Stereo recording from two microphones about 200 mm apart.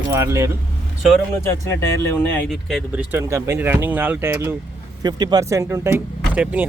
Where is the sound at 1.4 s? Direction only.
15° left (ahead or behind).